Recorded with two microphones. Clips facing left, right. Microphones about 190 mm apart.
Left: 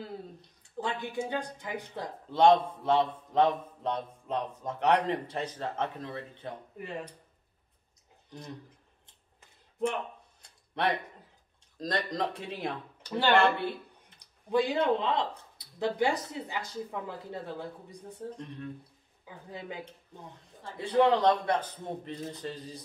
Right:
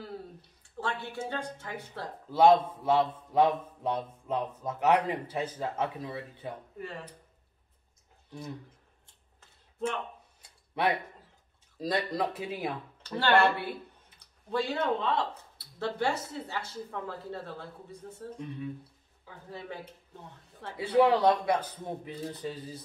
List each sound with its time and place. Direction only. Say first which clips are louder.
0.7 s speech: left 2 dB; 15° left (ahead or behind)
2.3 s speech: right 1 dB; 5° right (ahead or behind)
6.8 s speech: left 4 dB; 20° left (ahead or behind)
8.3 s speech: right 3 dB; 5° right (ahead or behind)
9.0 s a sound: left 1 dB; 15° left (ahead or behind)
10.4 s a sound: right 1 dB; 5° right (ahead or behind)
11.8 s speech: right 1 dB; 5° right (ahead or behind)
13.0 s speech: even; 10° left (ahead or behind)
18.4 s speech: right 3 dB; 5° right (ahead or behind)
19.2 s speech: left 1 dB; 15° left (ahead or behind)
20.7 s speech: right 1 dB; 10° right (ahead or behind)